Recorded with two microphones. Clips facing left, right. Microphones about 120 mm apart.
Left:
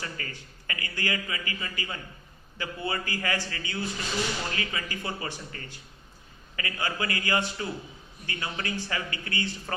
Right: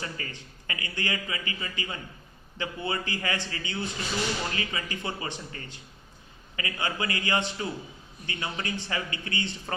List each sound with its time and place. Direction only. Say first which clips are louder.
0.0 s a man's voice: right 1 dB; 25° right (ahead or behind)